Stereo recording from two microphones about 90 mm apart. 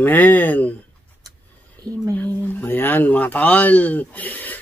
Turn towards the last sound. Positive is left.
turn(degrees=20)  # may be behind; listen again after turning